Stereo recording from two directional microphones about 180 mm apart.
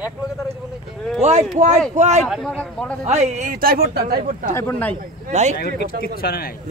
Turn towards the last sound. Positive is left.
turn(degrees=60)  # may be behind; listen again after turning